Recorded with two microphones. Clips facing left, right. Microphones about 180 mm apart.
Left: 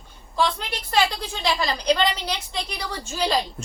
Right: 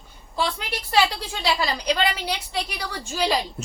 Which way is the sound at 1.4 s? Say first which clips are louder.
Even; 10° right (ahead or behind).